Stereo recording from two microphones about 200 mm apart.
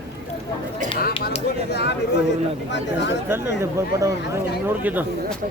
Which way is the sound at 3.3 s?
10° right (ahead or behind).